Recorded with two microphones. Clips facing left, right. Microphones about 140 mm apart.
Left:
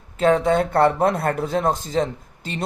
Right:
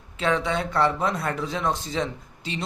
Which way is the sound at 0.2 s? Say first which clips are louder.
Left 7 dB; 45° left (ahead or behind).